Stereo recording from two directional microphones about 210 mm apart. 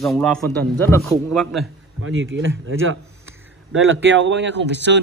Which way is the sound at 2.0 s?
70° right (ahead or behind).